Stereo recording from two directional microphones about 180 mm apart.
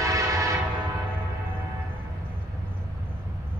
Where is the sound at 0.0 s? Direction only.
20° right (ahead or behind).